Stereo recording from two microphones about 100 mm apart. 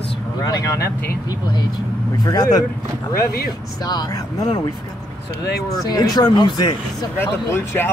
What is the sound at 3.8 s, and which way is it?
Speech, 40° left (ahead or behind).